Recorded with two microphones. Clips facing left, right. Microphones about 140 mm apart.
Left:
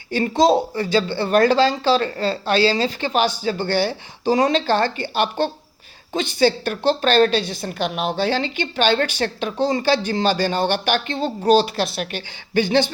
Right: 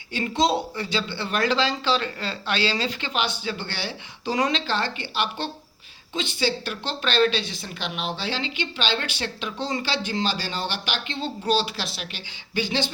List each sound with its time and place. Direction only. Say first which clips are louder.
0.1 s a woman's voice: left 7 dB; 45° left (ahead or behind)